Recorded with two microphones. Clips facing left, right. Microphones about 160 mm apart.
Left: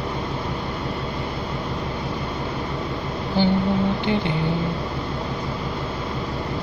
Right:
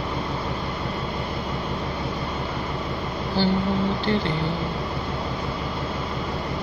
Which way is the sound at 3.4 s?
15° left (ahead or behind).